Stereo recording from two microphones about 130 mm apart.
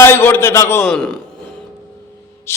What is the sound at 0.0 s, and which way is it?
Speech, 15° left (ahead or behind).